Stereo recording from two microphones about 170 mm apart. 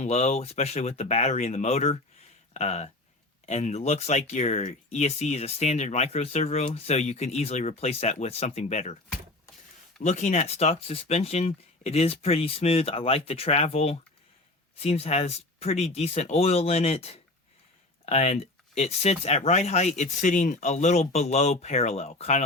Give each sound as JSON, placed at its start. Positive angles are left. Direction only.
{"t": 0.0, "sound": "speech", "side_deg": 40}
{"t": 10.0, "sound": "speech", "side_deg": 45}